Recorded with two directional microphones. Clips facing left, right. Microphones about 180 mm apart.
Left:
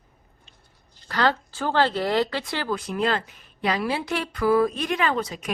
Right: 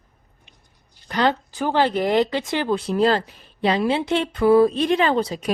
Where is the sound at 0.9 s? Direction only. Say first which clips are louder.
Right 3 dB; 20° right (ahead or behind).